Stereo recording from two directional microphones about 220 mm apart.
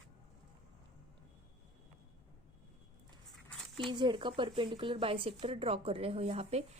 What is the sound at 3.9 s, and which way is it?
A woman's voice, 20° right (ahead or behind).